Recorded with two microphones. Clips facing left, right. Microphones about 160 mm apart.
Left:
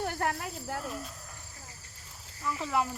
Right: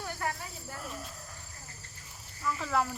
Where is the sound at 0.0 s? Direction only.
60° left (ahead or behind).